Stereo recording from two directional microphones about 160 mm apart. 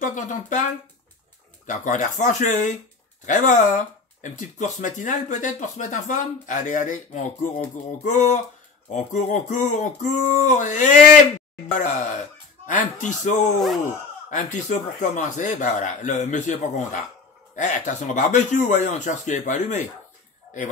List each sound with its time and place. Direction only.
0.0 s speech: 50° left (ahead or behind)
1.7 s speech: 50° left (ahead or behind)